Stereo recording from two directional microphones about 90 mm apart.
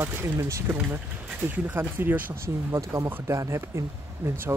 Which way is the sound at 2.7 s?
35° right (ahead or behind).